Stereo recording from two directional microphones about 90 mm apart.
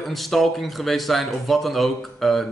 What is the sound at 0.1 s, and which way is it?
Speech, centre (ahead or behind).